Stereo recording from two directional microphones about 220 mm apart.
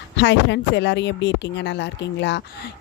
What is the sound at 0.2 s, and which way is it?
Speech, 55° left (ahead or behind).